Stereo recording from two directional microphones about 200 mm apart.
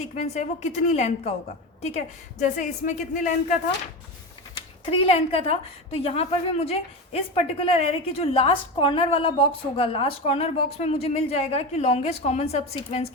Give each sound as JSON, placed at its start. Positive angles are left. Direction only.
{"t": 0.0, "sound": "a woman's voice", "side_deg": 35}
{"t": 4.5, "sound": "a woman's voice", "side_deg": 30}